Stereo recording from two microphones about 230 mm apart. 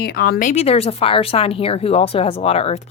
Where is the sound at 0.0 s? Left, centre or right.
Left.